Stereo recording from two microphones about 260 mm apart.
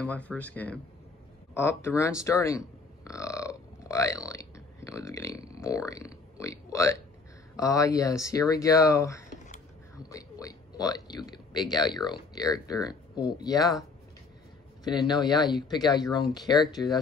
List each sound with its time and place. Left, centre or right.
0.0 s speech: centre
3.1 s burping: centre
5.6 s speech: centre
10.1 s a sound: centre
12.1 s speech: centre
14.9 s speech: centre
15.3 s speech: centre
16.1 s speech: centre